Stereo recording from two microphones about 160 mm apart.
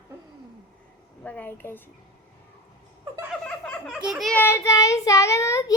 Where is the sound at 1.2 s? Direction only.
10° left (ahead or behind).